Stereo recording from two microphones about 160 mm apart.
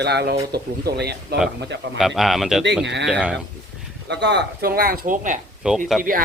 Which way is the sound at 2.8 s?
90° right.